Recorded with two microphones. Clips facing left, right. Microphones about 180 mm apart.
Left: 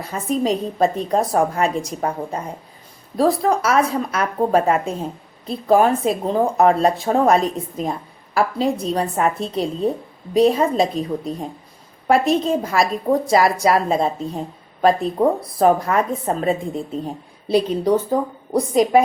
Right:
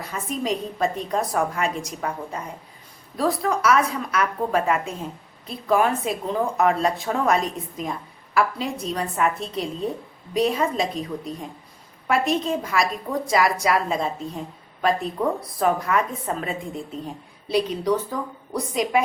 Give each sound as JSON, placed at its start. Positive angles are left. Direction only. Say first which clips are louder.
{"t": 0.0, "sound": "a woman's voice", "louder": "left 7 dB", "side_deg": 35}